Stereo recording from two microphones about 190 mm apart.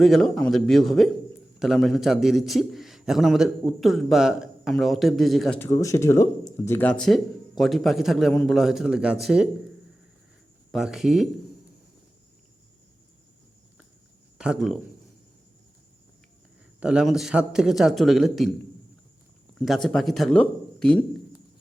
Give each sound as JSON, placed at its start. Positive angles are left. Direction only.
{"t": 0.0, "sound": "a man's voice", "side_deg": 0}
{"t": 5.5, "sound": "speech", "side_deg": 15}
{"t": 7.0, "sound": "a man's voice", "side_deg": 0}
{"t": 10.7, "sound": "a man's voice", "side_deg": 0}
{"t": 14.3, "sound": "speech", "side_deg": -5}
{"t": 16.8, "sound": "a man's voice", "side_deg": -5}
{"t": 19.5, "sound": "speech", "side_deg": 0}